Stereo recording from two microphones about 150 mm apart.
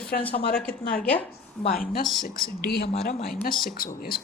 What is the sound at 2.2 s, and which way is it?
Speech, 75° left (ahead or behind).